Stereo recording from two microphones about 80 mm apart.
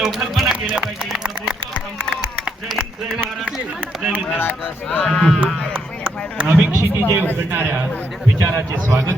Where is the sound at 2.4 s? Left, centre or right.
Centre.